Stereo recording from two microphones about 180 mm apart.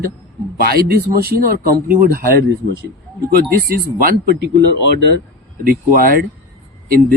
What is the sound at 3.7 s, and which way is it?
Speech, 55° right (ahead or behind).